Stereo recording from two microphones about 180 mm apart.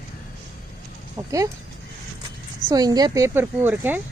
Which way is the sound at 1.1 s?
20° right (ahead or behind).